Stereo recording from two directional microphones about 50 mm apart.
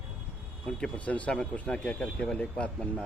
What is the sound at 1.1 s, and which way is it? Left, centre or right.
Speech, left.